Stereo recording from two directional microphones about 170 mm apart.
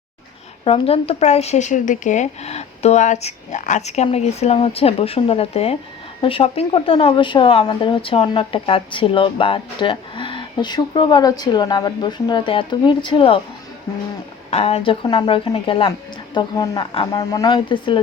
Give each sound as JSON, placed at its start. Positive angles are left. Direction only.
{"t": 0.6, "sound": "speech", "side_deg": 35}
{"t": 14.5, "sound": "speech", "side_deg": 35}